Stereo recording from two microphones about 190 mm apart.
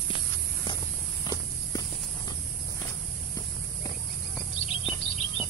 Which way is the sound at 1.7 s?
20° left (ahead or behind).